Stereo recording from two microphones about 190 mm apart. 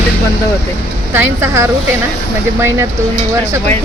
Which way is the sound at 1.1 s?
10° right (ahead or behind).